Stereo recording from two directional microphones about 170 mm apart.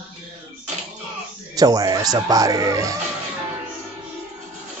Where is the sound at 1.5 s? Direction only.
20° right (ahead or behind).